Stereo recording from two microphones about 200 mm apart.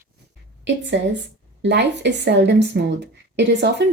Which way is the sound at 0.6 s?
65° right (ahead or behind).